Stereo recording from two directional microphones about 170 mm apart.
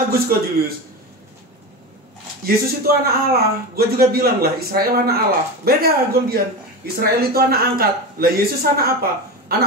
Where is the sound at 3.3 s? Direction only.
65° right (ahead or behind).